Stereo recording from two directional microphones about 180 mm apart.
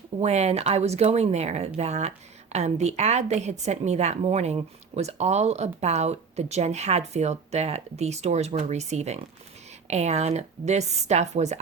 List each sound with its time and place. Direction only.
0.2 s a woman's voice: 35° right (ahead or behind)